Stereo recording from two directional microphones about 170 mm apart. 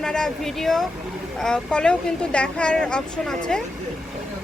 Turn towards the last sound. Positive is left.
turn(degrees=5)  # may be behind; listen again after turning